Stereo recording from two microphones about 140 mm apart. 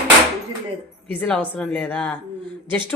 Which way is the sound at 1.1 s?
10° left (ahead or behind).